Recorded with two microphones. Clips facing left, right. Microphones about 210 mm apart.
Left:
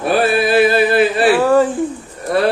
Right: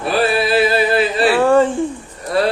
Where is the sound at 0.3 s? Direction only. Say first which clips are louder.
Left 3 dB; 50° left (ahead or behind).